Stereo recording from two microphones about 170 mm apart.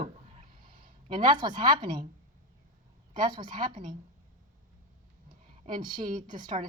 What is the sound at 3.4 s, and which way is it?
Speech, 55° right (ahead or behind).